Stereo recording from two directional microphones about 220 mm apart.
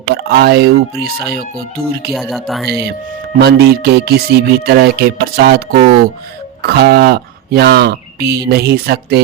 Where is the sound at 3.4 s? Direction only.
45° right (ahead or behind).